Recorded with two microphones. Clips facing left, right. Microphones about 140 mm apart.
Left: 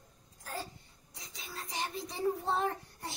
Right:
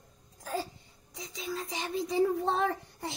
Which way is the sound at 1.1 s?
90° right.